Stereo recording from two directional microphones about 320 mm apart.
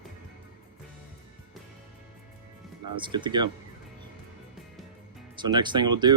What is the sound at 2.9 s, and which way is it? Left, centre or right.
Speech, centre.